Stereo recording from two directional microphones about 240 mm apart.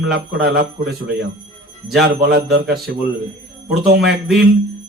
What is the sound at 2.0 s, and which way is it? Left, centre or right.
Speech, right.